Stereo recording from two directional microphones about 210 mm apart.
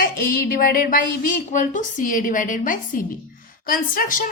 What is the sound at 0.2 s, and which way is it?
A woman's voice, 45° left (ahead or behind).